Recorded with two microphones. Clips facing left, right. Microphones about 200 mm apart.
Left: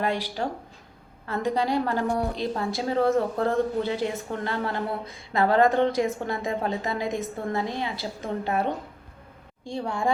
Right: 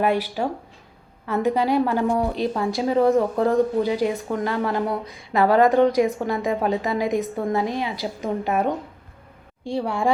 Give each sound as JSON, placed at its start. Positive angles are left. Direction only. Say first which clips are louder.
{"t": 0.0, "sound": "a woman's voice", "louder": "right 5 dB", "side_deg": -15}